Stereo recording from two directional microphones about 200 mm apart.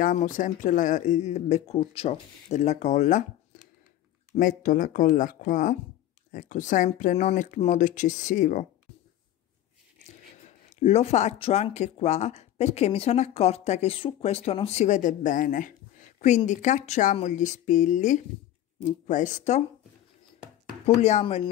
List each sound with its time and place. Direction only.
0.0 s speech: 40° left (ahead or behind)
4.4 s speech: 40° left (ahead or behind)
10.8 s speech: 30° left (ahead or behind)
20.8 s speech: 35° left (ahead or behind)